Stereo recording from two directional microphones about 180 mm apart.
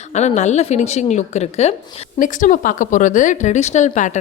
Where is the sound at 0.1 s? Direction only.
40° left (ahead or behind).